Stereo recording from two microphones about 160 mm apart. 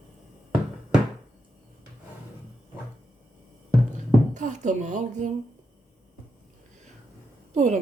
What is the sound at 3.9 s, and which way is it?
Music, 50° right (ahead or behind).